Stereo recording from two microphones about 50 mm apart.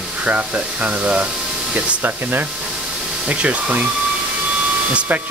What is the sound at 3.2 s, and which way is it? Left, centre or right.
Speech, right.